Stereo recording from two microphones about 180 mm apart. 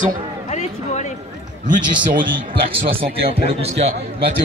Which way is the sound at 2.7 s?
30° right (ahead or behind).